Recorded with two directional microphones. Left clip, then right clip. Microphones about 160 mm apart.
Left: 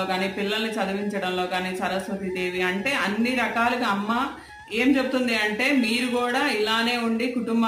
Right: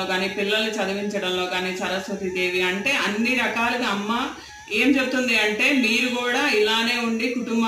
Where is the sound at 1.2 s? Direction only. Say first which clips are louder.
Right 1 dB; 10° left (ahead or behind).